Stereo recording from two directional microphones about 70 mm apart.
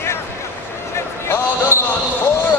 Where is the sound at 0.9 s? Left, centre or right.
Left.